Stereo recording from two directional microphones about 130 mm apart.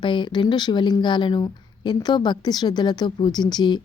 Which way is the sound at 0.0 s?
40° left (ahead or behind).